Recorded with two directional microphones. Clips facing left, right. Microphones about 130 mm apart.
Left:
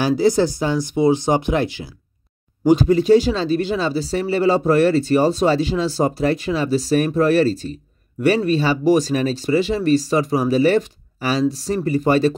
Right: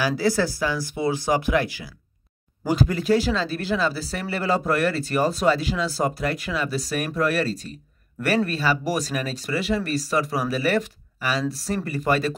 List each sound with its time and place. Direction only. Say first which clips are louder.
0.2 s speech: left 6 dB; 20° left (ahead or behind)